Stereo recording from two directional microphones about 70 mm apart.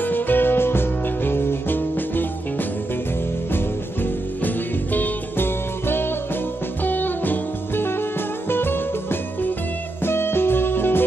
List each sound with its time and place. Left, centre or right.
0.0 s music: left
3.5 s music: left